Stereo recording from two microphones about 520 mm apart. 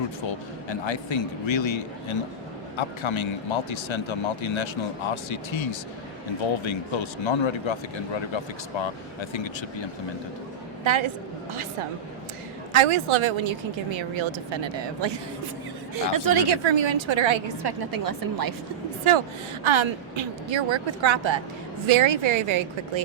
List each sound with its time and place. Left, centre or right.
0.7 s speech: left
10.8 s a woman's voice: right
12.7 s a woman's voice: right
16.0 s a woman's voice: right
19.6 s a woman's voice: right